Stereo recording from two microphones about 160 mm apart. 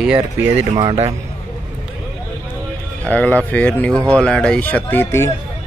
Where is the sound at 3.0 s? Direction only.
10° left (ahead or behind).